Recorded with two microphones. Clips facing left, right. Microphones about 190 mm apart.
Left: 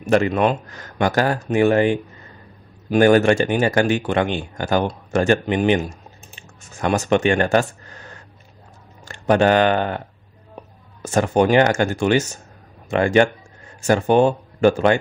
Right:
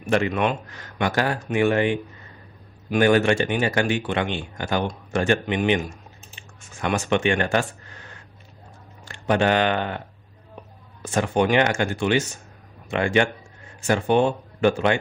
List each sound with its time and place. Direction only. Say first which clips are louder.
0.0 s speech: left 5 dB; 40° left (ahead or behind)